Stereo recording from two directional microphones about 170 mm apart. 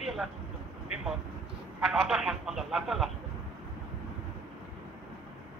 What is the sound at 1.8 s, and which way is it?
Speech, centre (ahead or behind).